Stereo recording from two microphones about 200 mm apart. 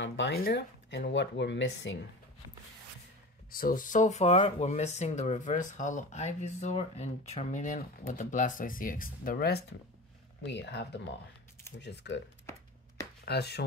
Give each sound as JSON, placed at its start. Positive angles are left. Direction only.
{"t": 0.0, "sound": "speech", "side_deg": 65}
{"t": 0.4, "sound": "speech", "side_deg": 55}
{"t": 3.5, "sound": "speech", "side_deg": 45}
{"t": 13.2, "sound": "speech", "side_deg": 55}